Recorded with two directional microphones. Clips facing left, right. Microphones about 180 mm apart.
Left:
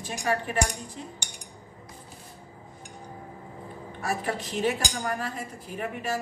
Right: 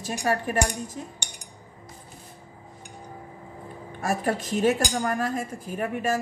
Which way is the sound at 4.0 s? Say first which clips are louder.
Right 4 dB; 45° right (ahead or behind).